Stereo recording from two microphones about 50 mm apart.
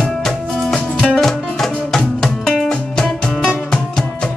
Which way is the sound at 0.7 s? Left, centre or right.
Centre.